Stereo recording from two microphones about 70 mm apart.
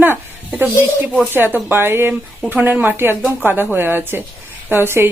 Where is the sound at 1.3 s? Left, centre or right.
Right.